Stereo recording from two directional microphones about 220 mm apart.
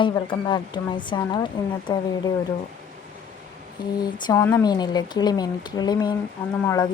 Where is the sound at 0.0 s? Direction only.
20° left (ahead or behind).